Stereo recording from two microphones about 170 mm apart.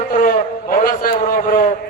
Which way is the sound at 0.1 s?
45° left (ahead or behind).